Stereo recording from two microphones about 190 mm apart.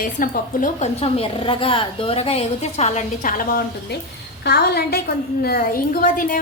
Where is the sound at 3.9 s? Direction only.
60° left (ahead or behind).